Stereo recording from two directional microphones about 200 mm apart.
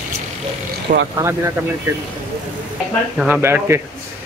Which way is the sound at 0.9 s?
40° right (ahead or behind).